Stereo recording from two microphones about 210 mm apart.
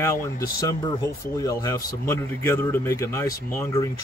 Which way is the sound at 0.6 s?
15° left (ahead or behind).